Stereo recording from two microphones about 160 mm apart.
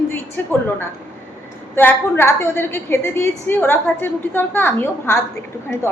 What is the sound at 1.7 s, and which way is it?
A woman's voice, 15° left (ahead or behind).